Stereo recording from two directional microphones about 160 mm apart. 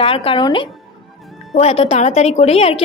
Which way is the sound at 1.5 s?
40° left (ahead or behind).